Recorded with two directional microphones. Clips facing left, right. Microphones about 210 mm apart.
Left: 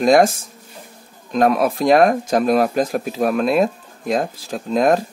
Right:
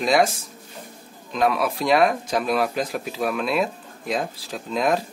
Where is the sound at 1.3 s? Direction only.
45° left (ahead or behind).